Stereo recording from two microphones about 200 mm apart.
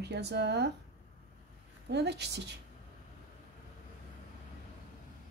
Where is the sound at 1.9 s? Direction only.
55° right (ahead or behind).